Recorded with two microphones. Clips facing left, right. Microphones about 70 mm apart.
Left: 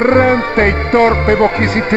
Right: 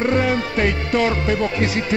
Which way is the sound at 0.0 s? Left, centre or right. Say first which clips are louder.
Left 8 dB; left.